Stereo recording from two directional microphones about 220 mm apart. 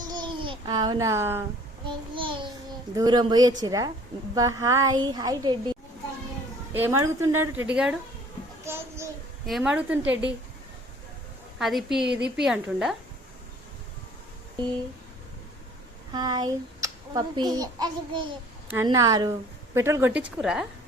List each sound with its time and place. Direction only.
0.1 s babbling: 20° right (ahead or behind)
1.9 s a child's voice: 20° right (ahead or behind)
6.7 s a woman's voice: 10° right (ahead or behind)
11.6 s a woman's voice: centre (ahead or behind)
16.1 s a child's voice: 20° right (ahead or behind); by 20.7 s centre (ahead or behind)